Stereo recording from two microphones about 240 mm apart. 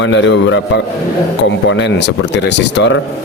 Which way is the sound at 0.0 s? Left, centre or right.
Left.